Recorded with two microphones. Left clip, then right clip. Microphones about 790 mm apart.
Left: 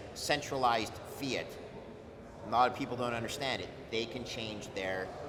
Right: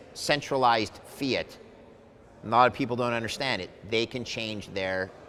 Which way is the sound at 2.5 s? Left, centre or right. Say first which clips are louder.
Right 7 dB; right.